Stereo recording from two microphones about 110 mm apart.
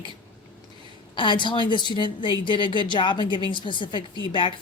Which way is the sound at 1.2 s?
45° left (ahead or behind).